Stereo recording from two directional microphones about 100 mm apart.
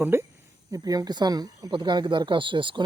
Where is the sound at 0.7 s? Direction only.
35° right (ahead or behind).